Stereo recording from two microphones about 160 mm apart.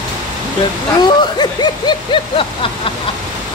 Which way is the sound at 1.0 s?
30° left (ahead or behind).